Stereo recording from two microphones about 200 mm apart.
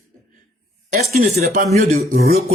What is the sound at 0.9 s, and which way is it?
Speech, 35° right (ahead or behind).